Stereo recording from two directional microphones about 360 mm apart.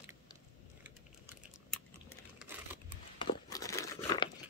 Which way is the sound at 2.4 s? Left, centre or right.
Centre.